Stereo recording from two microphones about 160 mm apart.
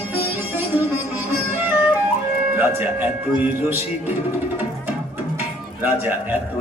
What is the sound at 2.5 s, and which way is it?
Music, 10° right (ahead or behind).